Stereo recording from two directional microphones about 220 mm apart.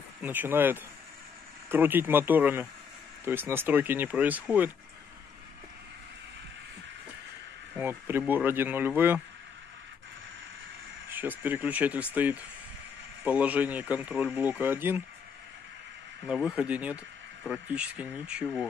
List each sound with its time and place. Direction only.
0.2 s speech: 10° right (ahead or behind)
7.7 s speech: 10° right (ahead or behind)
11.1 s speech: 10° right (ahead or behind)
16.3 s speech: 5° right (ahead or behind)